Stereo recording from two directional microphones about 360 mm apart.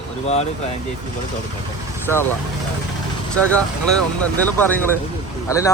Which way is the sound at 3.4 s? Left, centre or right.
Centre.